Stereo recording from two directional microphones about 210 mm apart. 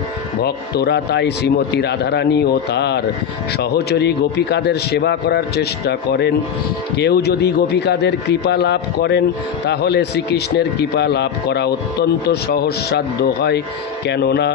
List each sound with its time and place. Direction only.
0.4 s speech: 50° left (ahead or behind)